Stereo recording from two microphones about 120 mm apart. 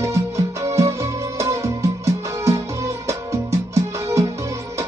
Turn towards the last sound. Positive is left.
turn(degrees=-25)  # may be behind; listen again after turning